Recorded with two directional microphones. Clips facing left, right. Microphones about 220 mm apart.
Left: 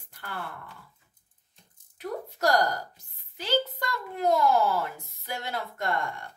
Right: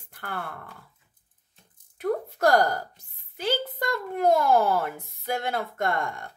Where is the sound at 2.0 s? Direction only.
50° right (ahead or behind).